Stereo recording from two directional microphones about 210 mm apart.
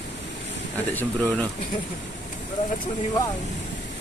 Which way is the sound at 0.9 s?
5° left (ahead or behind).